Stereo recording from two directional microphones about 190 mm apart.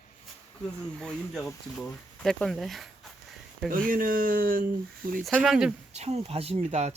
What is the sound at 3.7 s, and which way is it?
Speech, 45° right (ahead or behind).